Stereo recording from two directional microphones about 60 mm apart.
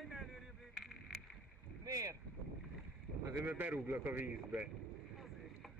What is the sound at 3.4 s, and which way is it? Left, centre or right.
Speech, right.